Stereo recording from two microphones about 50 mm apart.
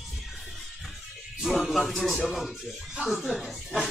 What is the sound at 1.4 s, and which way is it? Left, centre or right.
Speech, centre.